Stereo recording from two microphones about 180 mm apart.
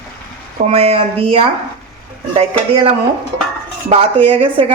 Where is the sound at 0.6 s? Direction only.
35° right (ahead or behind).